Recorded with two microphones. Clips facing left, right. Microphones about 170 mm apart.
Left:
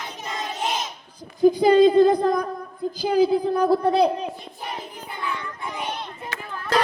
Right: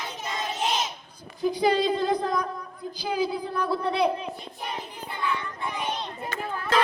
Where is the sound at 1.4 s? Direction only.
45° left (ahead or behind).